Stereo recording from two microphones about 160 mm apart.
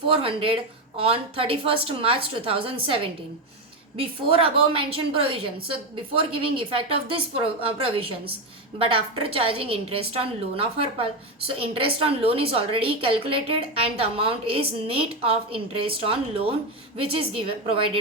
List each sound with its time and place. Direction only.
0.1 s a woman's voice: 35° right (ahead or behind)